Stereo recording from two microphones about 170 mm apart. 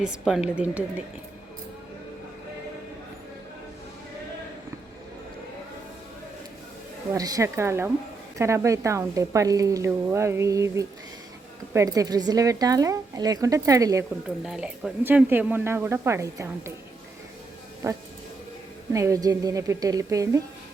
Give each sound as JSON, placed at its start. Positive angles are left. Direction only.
{"t": 0.0, "sound": "a woman's voice", "side_deg": -5}
{"t": 7.1, "sound": "a woman's voice", "side_deg": -20}
{"t": 14.3, "sound": "a woman's voice", "side_deg": -5}
{"t": 17.8, "sound": "a woman's voice", "side_deg": -15}